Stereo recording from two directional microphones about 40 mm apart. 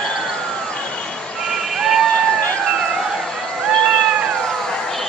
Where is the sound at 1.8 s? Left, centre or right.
Centre.